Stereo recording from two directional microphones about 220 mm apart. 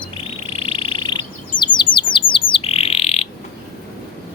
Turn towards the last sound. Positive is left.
turn(degrees=30)  # may be behind; listen again after turning